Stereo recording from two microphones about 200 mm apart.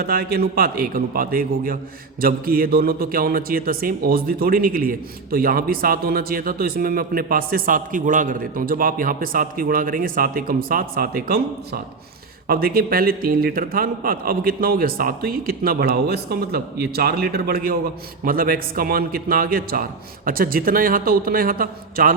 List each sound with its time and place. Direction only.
0.0 s a man's voice: 50° right (ahead or behind)